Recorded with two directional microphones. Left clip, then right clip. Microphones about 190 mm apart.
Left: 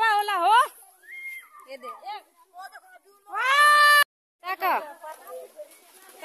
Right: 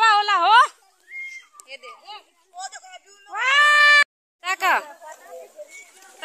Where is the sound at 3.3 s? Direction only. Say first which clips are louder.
Right 2 dB; 50° right (ahead or behind).